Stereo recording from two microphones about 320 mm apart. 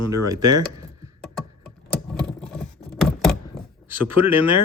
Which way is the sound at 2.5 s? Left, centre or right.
Centre.